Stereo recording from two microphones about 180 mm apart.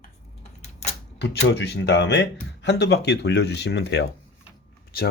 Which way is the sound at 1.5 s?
70° left (ahead or behind).